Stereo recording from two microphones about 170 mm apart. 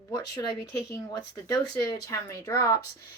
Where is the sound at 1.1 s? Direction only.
20° left (ahead or behind).